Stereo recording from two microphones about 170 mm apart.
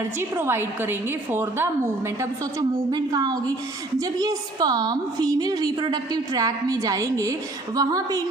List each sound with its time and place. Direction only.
0.2 s a woman's voice: 15° right (ahead or behind)